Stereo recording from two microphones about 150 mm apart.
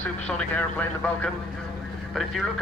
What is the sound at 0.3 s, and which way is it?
A man's voice, 10° left (ahead or behind).